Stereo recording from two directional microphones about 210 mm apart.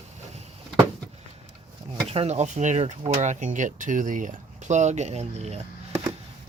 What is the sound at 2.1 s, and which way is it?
Speech, 30° right (ahead or behind).